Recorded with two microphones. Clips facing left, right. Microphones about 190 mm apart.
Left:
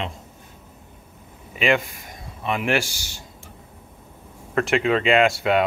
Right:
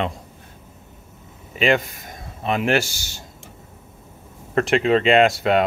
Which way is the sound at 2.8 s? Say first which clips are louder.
Right 1 dB; 25° right (ahead or behind).